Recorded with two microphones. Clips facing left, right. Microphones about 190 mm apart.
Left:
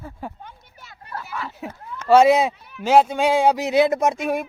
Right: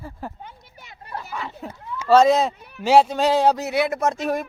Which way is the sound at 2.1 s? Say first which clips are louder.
Left 1 dB; 5° left (ahead or behind).